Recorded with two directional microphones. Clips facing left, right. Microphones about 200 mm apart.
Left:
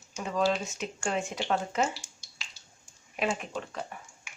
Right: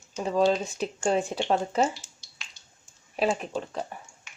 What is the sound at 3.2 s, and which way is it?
Speech, 35° right (ahead or behind).